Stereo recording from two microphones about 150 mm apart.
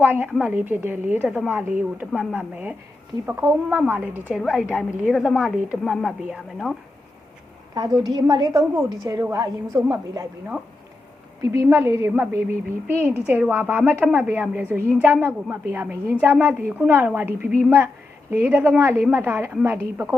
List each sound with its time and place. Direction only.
0.0 s a woman's voice: 15° right (ahead or behind)
8.0 s a woman's voice: 25° right (ahead or behind)
11.5 s a woman's voice: 20° right (ahead or behind)